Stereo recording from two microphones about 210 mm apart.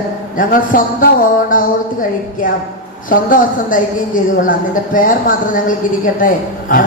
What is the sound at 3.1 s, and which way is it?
Speech, 40° left (ahead or behind).